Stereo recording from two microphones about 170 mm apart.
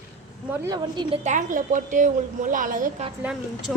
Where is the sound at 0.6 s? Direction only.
25° right (ahead or behind).